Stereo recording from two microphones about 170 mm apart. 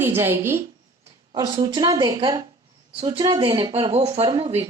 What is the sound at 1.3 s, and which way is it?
A woman's voice, 25° right (ahead or behind).